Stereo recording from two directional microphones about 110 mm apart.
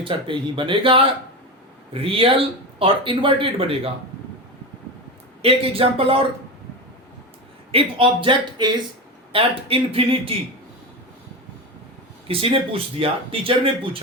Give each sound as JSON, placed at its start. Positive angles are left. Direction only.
{"t": 0.0, "sound": "speech", "side_deg": -50}
{"t": 5.4, "sound": "speech", "side_deg": -60}
{"t": 7.7, "sound": "speech", "side_deg": -55}
{"t": 9.3, "sound": "speech", "side_deg": -55}
{"t": 12.3, "sound": "speech", "side_deg": -55}